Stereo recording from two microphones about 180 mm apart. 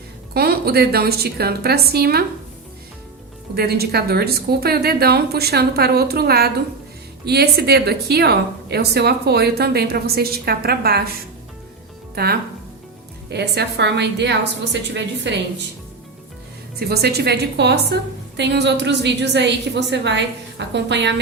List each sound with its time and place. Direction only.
0.3 s a woman's voice: 60° right (ahead or behind)
3.5 s a woman's voice: 60° right (ahead or behind)
12.1 s a woman's voice: 60° right (ahead or behind)
16.9 s a woman's voice: 65° right (ahead or behind)